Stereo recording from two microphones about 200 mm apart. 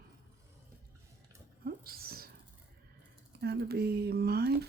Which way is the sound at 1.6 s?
50° right (ahead or behind).